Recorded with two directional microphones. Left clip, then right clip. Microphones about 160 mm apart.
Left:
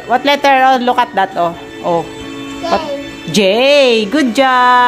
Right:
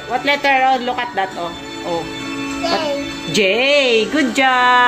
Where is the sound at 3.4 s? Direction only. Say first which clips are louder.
Left 6 dB; 30° left (ahead or behind).